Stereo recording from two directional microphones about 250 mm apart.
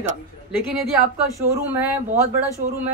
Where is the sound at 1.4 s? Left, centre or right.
Centre.